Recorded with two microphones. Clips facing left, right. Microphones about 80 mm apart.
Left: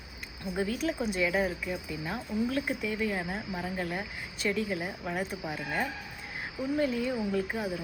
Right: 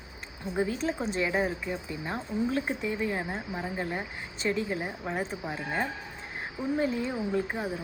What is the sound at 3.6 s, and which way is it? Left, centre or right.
Speech, centre.